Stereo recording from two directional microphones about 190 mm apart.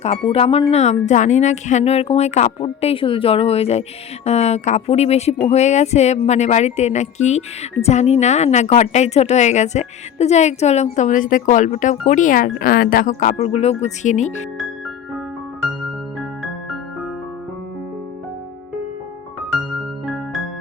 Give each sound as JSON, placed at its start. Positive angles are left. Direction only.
{"t": 0.0, "sound": "speech", "side_deg": 30}
{"t": 16.4, "sound": "music", "side_deg": 0}